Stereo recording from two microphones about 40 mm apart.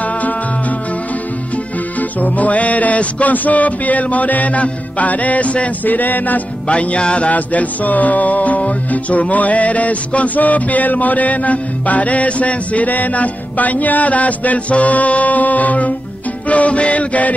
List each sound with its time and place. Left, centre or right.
2.0 s music: left
5.9 s music: left
6.7 s music: left